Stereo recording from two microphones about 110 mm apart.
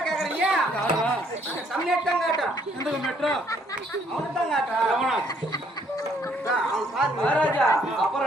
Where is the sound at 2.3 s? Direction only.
35° left (ahead or behind).